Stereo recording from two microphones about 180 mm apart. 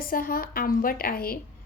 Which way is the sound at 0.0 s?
55° left (ahead or behind).